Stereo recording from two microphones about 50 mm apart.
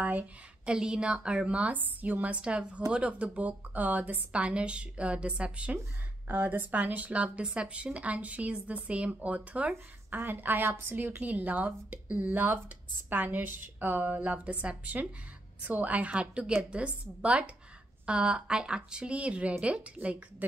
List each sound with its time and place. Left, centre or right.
0.0 s speech: right
0.7 s a woman's voice: centre
6.2 s a woman's voice: right
10.1 s a woman's voice: right
11.2 s a woman's voice: right